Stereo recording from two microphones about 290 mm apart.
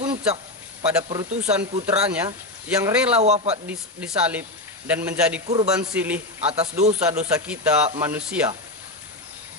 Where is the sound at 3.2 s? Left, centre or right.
Right.